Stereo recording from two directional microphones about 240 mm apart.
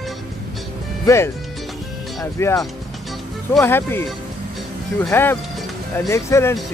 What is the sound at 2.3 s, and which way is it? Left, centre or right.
Speech, centre.